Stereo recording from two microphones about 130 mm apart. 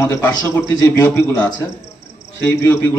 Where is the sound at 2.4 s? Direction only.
15° left (ahead or behind).